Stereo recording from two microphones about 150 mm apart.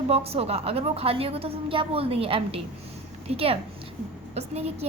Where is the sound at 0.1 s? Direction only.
40° right (ahead or behind).